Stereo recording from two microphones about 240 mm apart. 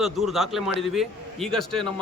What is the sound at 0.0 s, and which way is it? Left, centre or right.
A man's voice, centre.